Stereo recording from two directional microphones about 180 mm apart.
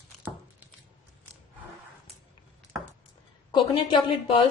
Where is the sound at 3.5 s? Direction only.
30° left (ahead or behind).